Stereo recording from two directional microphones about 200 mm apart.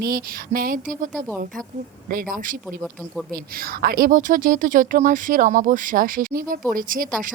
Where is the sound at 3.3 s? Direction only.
45° right (ahead or behind).